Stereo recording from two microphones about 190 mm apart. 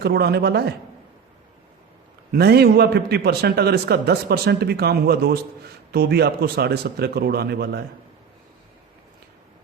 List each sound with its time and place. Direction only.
0.0 s a man's voice: 60° right (ahead or behind)
2.3 s a man's voice: 55° right (ahead or behind)